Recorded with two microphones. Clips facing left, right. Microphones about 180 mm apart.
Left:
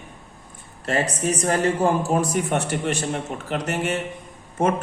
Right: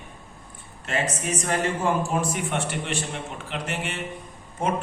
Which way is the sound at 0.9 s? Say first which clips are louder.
Left 4 dB; 40° left (ahead or behind).